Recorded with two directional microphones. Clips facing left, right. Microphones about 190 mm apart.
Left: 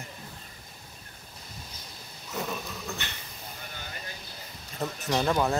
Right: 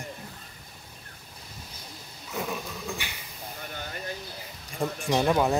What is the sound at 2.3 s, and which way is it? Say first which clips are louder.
Dog: right 1 dB; 10° right (ahead or behind).